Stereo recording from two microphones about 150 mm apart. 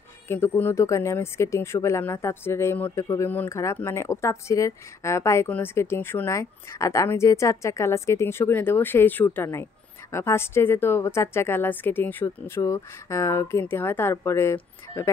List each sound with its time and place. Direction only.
0.3 s speech: 15° left (ahead or behind)